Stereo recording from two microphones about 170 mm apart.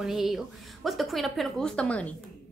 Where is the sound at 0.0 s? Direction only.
Centre (ahead or behind).